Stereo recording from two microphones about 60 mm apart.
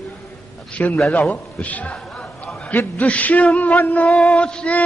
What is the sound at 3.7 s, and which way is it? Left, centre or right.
Chant, left.